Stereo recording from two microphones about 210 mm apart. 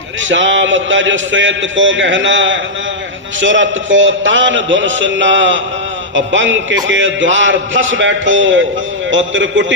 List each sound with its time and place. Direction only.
0.2 s a man's voice: 65° right (ahead or behind)